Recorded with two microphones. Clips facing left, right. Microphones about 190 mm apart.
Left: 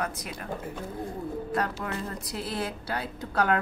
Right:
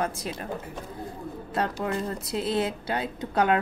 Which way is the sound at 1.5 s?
25° right (ahead or behind).